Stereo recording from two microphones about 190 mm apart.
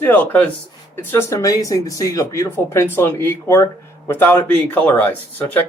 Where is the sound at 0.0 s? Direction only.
10° left (ahead or behind).